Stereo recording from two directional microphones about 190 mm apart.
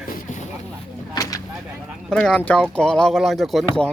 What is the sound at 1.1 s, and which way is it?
Vehicle, 20° left (ahead or behind).